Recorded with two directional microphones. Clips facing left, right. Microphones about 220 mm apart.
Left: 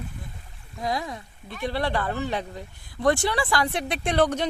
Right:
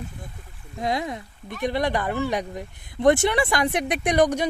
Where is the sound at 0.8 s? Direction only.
20° right (ahead or behind).